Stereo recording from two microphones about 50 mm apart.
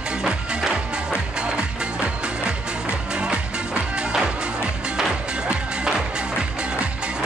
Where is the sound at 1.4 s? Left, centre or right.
Centre.